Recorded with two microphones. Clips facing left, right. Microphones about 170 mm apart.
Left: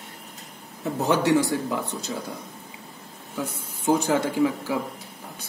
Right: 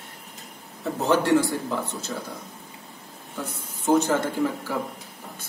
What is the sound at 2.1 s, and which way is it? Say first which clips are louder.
Speech: left 1 dB; 10° left (ahead or behind).